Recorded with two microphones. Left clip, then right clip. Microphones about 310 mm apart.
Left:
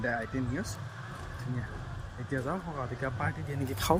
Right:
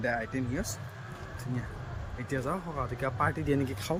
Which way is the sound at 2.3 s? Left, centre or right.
Centre.